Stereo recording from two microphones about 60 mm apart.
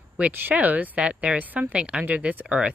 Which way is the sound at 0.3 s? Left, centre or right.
Right.